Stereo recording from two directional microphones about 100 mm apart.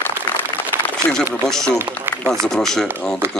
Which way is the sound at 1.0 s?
20° left (ahead or behind).